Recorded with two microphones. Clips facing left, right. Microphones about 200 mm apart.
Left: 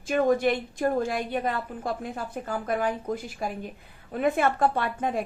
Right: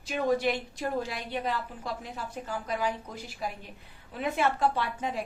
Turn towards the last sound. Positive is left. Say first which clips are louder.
# left 4 dB
turn(degrees=50)  # may be behind; listen again after turning